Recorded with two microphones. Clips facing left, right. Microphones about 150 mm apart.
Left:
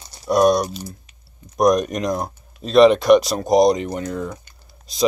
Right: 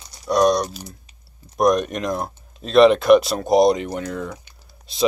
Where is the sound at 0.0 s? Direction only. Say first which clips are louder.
Left 2 dB; 30° left (ahead or behind).